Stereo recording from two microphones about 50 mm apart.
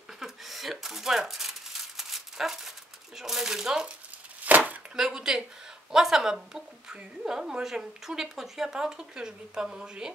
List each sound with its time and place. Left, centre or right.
0.2 s a sound: centre
3.2 s speech: centre
4.5 s chopping: right
4.9 s speech: centre